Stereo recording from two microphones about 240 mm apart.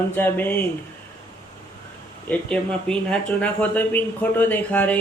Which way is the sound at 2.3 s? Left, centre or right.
Centre.